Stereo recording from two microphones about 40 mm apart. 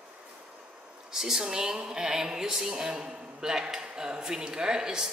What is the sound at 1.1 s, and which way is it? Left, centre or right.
A man's voice, centre.